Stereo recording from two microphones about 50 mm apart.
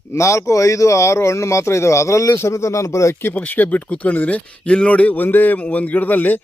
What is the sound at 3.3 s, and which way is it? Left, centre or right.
A man's voice, left.